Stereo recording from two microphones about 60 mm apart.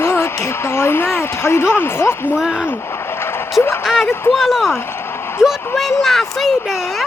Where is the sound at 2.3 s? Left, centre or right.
Centre.